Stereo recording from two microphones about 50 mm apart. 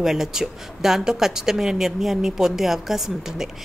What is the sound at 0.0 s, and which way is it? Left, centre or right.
A woman's voice, centre.